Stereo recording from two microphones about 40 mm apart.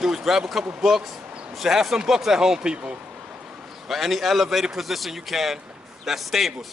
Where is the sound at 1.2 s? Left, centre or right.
Right.